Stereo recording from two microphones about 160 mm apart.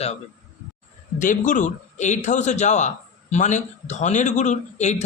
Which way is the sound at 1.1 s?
55° left (ahead or behind).